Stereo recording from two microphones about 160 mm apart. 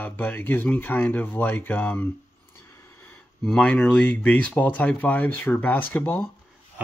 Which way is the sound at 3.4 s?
5° left (ahead or behind).